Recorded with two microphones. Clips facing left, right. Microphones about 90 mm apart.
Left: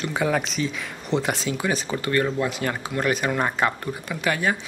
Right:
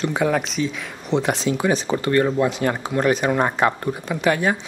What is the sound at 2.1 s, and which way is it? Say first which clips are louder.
Speech: right 4 dB; 15° right (ahead or behind).